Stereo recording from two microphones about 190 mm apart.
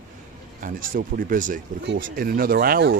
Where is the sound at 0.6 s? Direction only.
45° right (ahead or behind).